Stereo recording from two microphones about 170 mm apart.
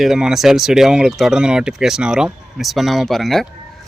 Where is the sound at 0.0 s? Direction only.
Centre (ahead or behind).